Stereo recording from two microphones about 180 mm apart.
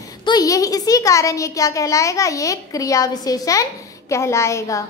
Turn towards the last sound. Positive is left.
turn(degrees=15)  # may be behind; listen again after turning